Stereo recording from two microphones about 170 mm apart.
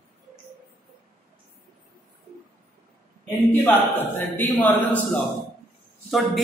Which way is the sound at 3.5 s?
10° left (ahead or behind).